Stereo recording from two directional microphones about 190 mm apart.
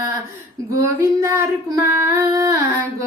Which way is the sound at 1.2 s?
15° right (ahead or behind).